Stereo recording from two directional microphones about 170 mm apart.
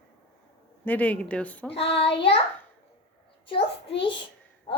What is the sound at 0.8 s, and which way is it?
Speech, 10° left (ahead or behind).